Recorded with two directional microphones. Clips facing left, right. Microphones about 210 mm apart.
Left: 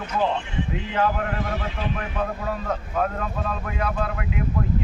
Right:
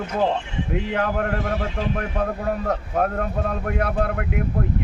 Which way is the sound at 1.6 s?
45° right (ahead or behind).